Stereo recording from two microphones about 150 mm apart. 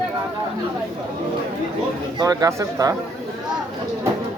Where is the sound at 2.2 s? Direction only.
25° right (ahead or behind).